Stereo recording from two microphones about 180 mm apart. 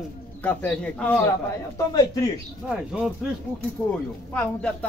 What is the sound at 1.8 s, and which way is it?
Speech, 20° left (ahead or behind).